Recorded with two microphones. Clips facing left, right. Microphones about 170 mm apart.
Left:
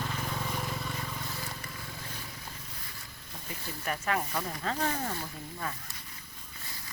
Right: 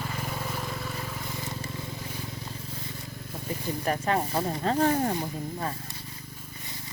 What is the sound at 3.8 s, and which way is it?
Speech, 35° right (ahead or behind).